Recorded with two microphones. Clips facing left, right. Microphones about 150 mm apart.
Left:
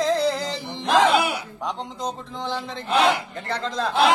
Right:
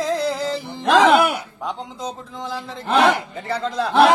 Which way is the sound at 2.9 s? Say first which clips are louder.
Right 3 dB; 45° right (ahead or behind).